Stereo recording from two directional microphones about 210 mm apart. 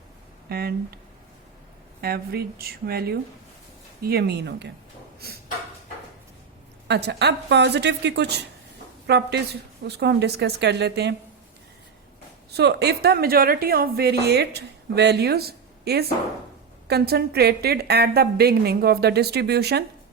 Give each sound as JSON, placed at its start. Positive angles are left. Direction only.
{"t": 0.4, "sound": "a woman's voice", "side_deg": -50}
{"t": 2.0, "sound": "a woman's voice", "side_deg": -45}
{"t": 6.8, "sound": "a woman's voice", "side_deg": -55}
{"t": 12.5, "sound": "a woman's voice", "side_deg": -50}